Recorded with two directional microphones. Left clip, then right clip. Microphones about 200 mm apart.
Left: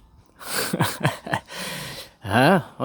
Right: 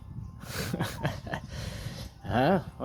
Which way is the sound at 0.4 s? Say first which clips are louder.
Left 10 dB; 40° left (ahead or behind).